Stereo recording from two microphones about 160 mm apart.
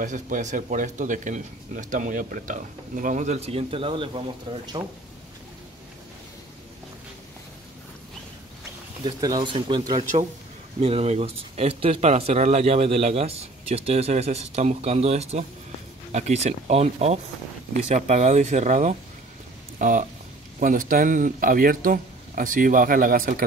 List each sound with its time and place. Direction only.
0.0 s a man's voice: 50° right (ahead or behind); by 4.6 s 30° right (ahead or behind)
9.0 s a man's voice: 25° right (ahead or behind); by 23.4 s 60° right (ahead or behind)